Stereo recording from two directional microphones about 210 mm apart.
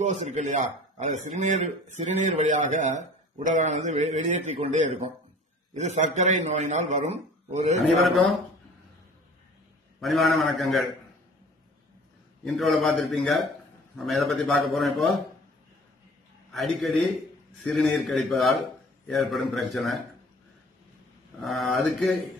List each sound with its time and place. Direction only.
0.0 s a man's voice: 35° right (ahead or behind)
9.9 s a man's voice: centre (ahead or behind)
12.4 s a man's voice: centre (ahead or behind)
16.5 s a man's voice: centre (ahead or behind)
21.4 s a man's voice: centre (ahead or behind)